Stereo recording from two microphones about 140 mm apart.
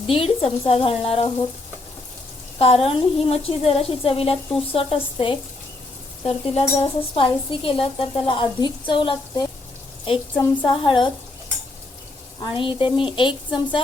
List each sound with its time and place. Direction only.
0.1 s speech: 40° left (ahead or behind)
2.6 s speech: 45° left (ahead or behind)
6.2 s dishes: 45° left (ahead or behind)
12.4 s dishes: 35° left (ahead or behind)